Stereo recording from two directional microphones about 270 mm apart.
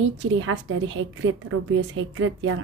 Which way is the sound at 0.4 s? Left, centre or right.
Right.